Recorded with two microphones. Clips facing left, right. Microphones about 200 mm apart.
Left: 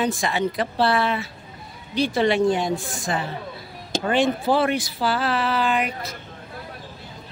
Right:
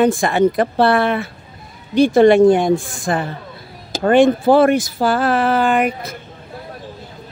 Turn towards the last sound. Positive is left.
turn(degrees=-50)  # may be behind; listen again after turning